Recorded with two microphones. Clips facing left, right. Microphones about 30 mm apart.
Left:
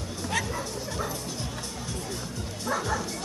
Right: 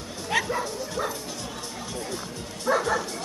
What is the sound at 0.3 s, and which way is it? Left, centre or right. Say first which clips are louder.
Speech: right 5 dB; right.